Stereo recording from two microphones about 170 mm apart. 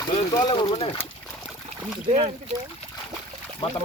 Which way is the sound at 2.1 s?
40° right (ahead or behind).